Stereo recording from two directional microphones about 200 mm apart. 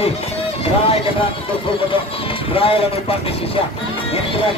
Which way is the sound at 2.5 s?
25° left (ahead or behind).